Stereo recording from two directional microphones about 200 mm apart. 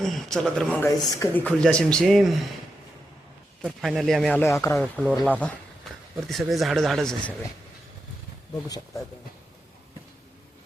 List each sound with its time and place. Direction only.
0.0 s speech: centre (ahead or behind)
3.6 s speech: centre (ahead or behind)
4.8 s speech: centre (ahead or behind)